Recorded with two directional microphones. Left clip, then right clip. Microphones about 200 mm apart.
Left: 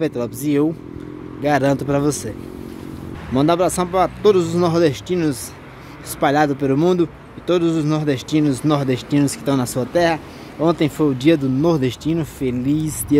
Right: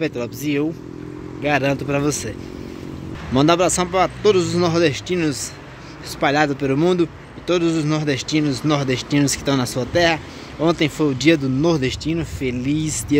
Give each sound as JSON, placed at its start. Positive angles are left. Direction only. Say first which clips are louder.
{"t": 0.0, "sound": "speech", "louder": "left 2 dB", "side_deg": 20}
{"t": 3.3, "sound": "a man's voice", "louder": "right 1 dB", "side_deg": 10}